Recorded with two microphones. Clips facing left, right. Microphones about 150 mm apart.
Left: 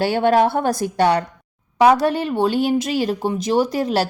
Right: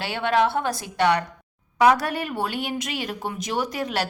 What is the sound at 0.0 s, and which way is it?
Speech, 40° left (ahead or behind).